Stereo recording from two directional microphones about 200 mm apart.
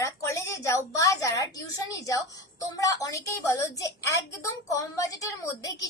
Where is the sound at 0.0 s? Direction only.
15° left (ahead or behind).